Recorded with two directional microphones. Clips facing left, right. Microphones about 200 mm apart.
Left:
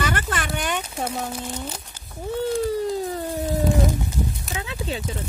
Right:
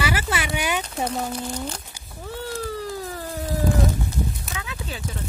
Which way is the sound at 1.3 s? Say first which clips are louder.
Right 2 dB; 5° left (ahead or behind).